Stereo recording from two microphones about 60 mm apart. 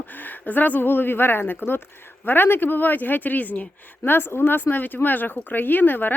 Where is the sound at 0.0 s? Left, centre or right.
Left.